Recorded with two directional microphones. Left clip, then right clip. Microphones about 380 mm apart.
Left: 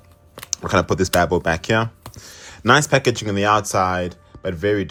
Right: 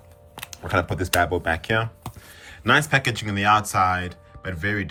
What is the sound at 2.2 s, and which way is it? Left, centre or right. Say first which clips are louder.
Speech: left 5 dB; centre.